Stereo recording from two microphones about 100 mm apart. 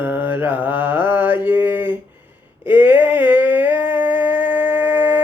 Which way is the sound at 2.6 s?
20° right (ahead or behind).